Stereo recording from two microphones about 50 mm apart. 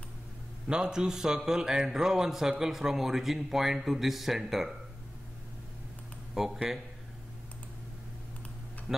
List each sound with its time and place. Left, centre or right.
0.7 s a man's voice: centre
6.3 s speech: centre